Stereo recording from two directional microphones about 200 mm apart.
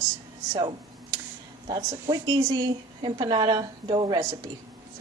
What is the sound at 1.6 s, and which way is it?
Speech, 20° right (ahead or behind).